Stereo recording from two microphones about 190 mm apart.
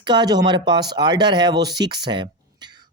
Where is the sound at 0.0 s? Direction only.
25° right (ahead or behind).